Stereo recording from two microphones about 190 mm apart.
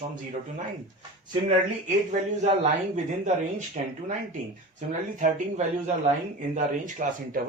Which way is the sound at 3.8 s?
40° right (ahead or behind).